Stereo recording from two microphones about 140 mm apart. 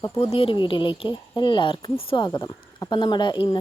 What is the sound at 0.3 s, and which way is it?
A woman's voice, 35° left (ahead or behind).